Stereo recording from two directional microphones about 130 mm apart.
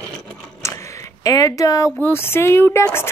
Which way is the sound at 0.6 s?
25° left (ahead or behind).